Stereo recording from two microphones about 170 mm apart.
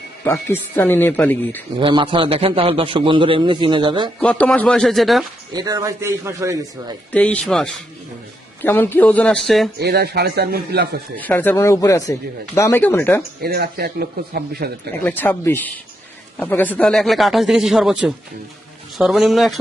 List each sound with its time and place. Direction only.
0.3 s speech: 15° left (ahead or behind)
1.8 s a man's voice: 30° right (ahead or behind)
4.2 s speech: 5° left (ahead or behind)
5.5 s a man's voice: 25° right (ahead or behind)
7.1 s speech: 10° left (ahead or behind)
9.8 s speech: 65° right (ahead or behind)
11.2 s speech: 10° left (ahead or behind)
13.4 s a man's voice: 65° right (ahead or behind)
15.0 s speech: 10° left (ahead or behind)